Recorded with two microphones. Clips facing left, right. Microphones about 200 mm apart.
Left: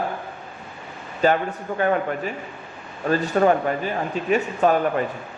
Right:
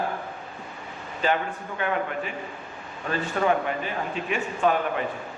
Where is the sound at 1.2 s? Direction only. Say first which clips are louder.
Left 6 dB; 45° left (ahead or behind).